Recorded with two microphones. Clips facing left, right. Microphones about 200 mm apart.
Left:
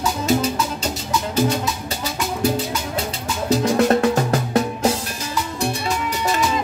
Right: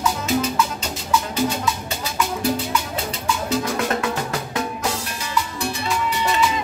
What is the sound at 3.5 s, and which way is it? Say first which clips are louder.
Music: left 8 dB; 40° left (ahead or behind).